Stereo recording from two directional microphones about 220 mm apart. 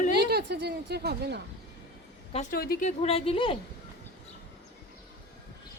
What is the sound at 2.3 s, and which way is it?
A woman's voice, 35° left (ahead or behind).